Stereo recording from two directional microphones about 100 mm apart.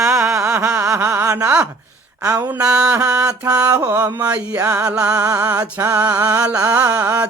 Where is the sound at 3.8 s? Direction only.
20° right (ahead or behind).